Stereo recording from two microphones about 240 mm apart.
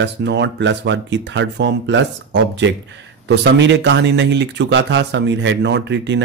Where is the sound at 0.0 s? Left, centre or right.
Right.